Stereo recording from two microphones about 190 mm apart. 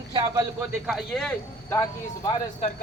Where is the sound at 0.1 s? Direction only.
25° right (ahead or behind).